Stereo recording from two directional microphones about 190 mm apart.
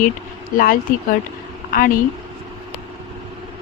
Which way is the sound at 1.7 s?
45° left (ahead or behind).